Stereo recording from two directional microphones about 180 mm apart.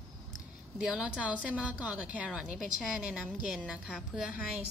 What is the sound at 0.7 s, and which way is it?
A woman's voice, 5° right (ahead or behind).